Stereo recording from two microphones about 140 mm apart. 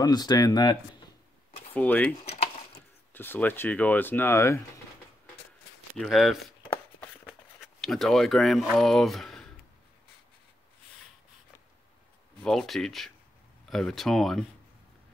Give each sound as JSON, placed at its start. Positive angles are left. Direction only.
{"t": 0.0, "sound": "speech", "side_deg": 30}
{"t": 1.7, "sound": "speech", "side_deg": 10}
{"t": 2.2, "sound": "a sound", "side_deg": 45}
{"t": 3.1, "sound": "speech", "side_deg": 15}
{"t": 5.9, "sound": "speech", "side_deg": 0}
{"t": 7.6, "sound": "speech", "side_deg": 0}
{"t": 12.4, "sound": "speech", "side_deg": 0}